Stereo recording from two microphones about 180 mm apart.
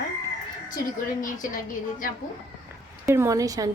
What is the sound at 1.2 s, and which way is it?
Speech, 45° left (ahead or behind).